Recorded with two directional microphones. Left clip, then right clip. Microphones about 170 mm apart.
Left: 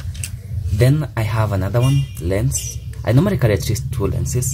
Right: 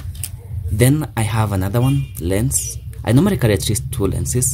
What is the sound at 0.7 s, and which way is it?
Speech, 25° right (ahead or behind).